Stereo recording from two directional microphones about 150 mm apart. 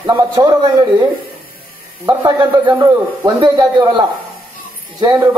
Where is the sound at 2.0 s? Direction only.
25° right (ahead or behind).